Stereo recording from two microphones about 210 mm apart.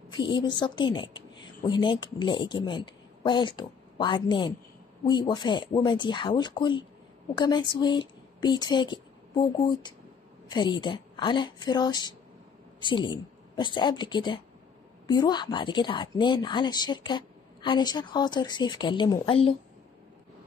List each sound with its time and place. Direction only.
0.1 s a woman's voice: 20° left (ahead or behind)
10.5 s a woman's voice: 20° left (ahead or behind)